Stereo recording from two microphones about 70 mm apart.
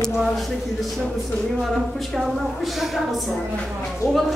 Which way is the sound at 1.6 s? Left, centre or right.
Centre.